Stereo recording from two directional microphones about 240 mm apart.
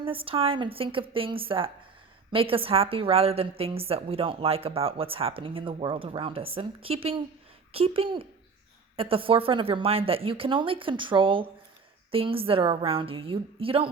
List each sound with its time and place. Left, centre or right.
0.0 s a woman's voice: right